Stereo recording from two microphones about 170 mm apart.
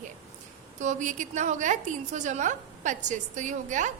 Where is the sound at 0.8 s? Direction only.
45° right (ahead or behind).